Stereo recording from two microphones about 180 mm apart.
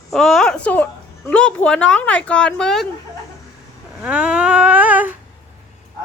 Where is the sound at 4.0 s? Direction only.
5° right (ahead or behind).